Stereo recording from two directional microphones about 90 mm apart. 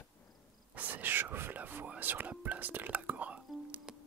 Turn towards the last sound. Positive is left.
turn(degrees=-15)  # may be behind; listen again after turning